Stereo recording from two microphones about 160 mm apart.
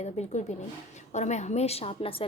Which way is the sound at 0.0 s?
45° left (ahead or behind).